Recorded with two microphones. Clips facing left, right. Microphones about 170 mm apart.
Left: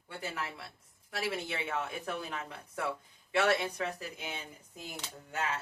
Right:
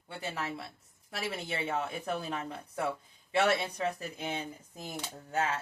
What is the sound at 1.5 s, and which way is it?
A woman's voice, 30° right (ahead or behind).